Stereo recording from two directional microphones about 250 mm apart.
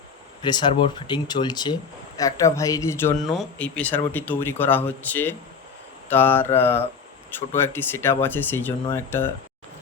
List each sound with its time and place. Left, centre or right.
0.4 s speech: centre
3.2 s speech: centre